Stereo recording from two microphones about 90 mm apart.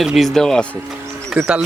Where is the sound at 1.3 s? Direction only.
10° right (ahead or behind).